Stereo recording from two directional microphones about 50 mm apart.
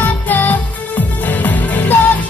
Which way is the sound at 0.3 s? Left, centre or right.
Left.